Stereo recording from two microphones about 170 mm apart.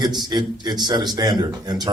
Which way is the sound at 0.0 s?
25° right (ahead or behind).